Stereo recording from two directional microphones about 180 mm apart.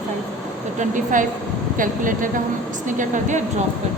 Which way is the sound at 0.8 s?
45° right (ahead or behind).